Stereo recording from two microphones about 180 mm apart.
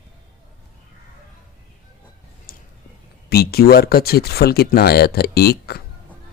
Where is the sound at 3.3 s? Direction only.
60° left (ahead or behind).